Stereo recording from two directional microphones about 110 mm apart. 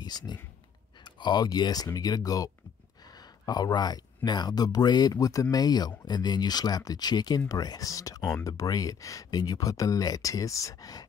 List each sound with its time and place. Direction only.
0.0 s speech: 35° left (ahead or behind)
8.2 s speech: 5° left (ahead or behind)
8.5 s speech: 30° left (ahead or behind)